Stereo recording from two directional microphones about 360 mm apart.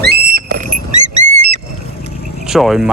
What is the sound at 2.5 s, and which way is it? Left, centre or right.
Speech, centre.